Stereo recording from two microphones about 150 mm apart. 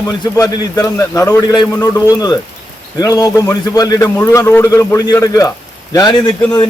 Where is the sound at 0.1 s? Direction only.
25° left (ahead or behind).